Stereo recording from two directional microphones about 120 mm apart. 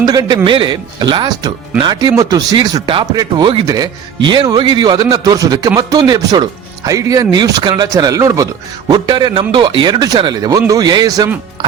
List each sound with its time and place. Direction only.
0.0 s a man's voice: 30° right (ahead or behind)